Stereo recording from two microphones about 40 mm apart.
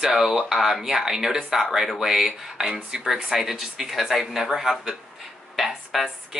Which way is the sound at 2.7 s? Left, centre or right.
Centre.